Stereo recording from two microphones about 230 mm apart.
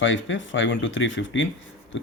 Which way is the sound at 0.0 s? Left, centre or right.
Left.